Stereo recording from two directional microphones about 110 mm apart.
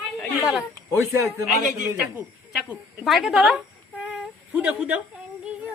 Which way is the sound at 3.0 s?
Centre (ahead or behind).